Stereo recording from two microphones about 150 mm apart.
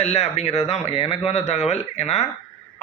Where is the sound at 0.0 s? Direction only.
45° left (ahead or behind).